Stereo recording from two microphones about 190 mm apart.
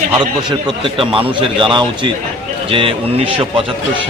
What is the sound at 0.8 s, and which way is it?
A man's voice, 30° right (ahead or behind).